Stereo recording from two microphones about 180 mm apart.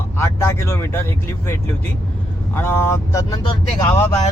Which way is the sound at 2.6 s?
15° left (ahead or behind).